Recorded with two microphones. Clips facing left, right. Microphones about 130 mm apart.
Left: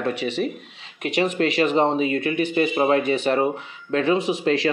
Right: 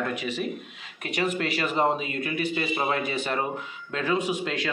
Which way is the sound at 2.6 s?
35° left (ahead or behind).